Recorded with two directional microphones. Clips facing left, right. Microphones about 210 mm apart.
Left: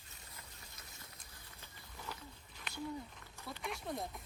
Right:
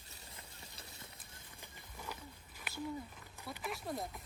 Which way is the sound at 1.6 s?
10° right (ahead or behind).